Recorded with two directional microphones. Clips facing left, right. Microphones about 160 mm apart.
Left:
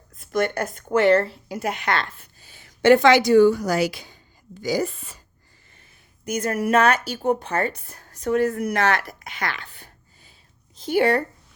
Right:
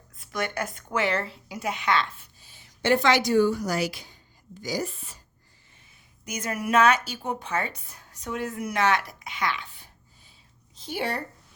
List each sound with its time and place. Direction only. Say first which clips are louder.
0.2 s a woman's voice: left 7 dB; 50° left (ahead or behind); by 5.1 s 85° left
6.2 s a woman's voice: left 7 dB; 55° left (ahead or behind)
10.8 s speech: left 11 dB; 75° left (ahead or behind)